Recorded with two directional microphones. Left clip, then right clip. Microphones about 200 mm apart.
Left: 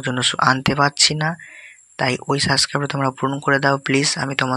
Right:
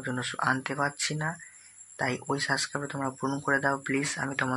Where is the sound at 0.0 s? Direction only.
35° left (ahead or behind).